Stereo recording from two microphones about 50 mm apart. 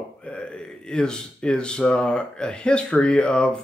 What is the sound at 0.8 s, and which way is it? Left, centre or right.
Speech, centre.